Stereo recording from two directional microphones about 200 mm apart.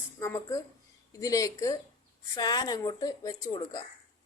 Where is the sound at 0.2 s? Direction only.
15° left (ahead or behind).